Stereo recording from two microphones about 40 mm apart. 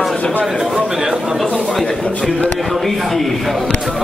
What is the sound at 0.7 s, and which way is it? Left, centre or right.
Chatter, centre.